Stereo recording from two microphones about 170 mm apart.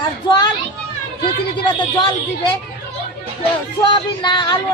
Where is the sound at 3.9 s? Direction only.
30° left (ahead or behind).